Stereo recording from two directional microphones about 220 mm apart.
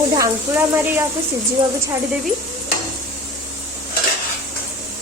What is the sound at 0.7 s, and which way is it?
Speech, 10° right (ahead or behind).